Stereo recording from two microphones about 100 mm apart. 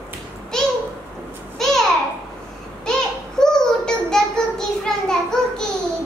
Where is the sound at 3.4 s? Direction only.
5° left (ahead or behind).